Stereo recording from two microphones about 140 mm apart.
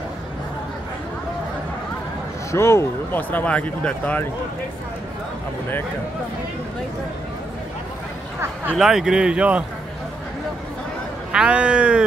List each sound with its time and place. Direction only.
2.5 s speech: 20° left (ahead or behind)
8.7 s speech: 5° right (ahead or behind)
11.3 s speech: 5° right (ahead or behind)